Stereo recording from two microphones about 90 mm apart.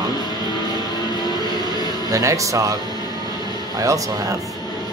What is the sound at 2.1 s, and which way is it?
Speech, 35° right (ahead or behind).